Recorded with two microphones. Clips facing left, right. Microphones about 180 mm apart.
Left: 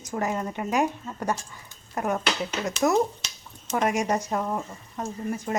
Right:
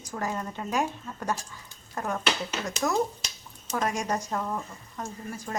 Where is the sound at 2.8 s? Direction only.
30° left (ahead or behind).